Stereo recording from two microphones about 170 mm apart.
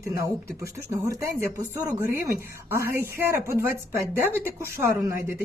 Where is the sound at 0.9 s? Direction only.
15° right (ahead or behind).